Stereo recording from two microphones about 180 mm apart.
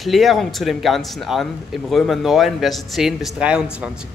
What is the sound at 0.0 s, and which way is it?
Speech, centre (ahead or behind).